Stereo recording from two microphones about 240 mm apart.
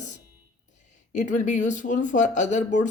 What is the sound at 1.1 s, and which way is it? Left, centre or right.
A woman's voice, left.